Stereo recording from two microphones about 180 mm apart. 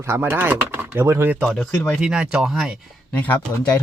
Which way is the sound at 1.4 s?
5° left (ahead or behind).